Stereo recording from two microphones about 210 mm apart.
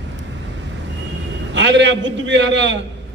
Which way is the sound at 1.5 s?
60° right (ahead or behind).